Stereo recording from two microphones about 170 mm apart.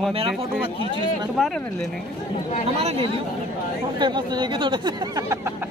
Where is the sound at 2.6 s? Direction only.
35° right (ahead or behind); by 5.5 s 20° right (ahead or behind).